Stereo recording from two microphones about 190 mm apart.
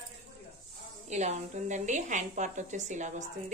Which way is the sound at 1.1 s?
35° right (ahead or behind).